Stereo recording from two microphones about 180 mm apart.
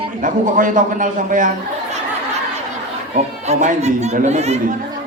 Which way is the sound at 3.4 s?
40° right (ahead or behind).